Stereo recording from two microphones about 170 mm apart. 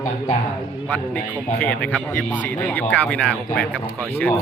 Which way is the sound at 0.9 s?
10° left (ahead or behind).